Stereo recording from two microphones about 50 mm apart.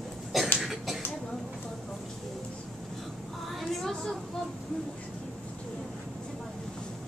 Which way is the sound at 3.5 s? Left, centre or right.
Centre.